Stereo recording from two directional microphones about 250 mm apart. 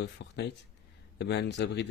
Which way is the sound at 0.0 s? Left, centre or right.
Left.